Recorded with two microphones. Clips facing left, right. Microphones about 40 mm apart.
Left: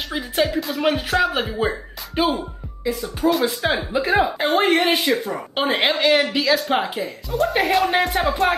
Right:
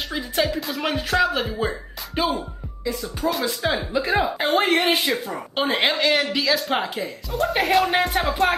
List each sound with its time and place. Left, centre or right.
0.1 s speech: centre
0.6 s speech: centre
1.3 s speech: centre
2.2 s speech: centre
3.6 s speech: left
4.2 s speech: centre